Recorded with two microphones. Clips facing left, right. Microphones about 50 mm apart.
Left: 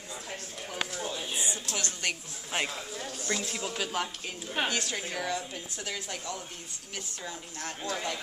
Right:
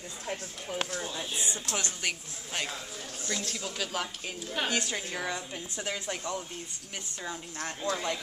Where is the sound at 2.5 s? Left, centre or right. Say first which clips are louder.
Left 3 dB; centre.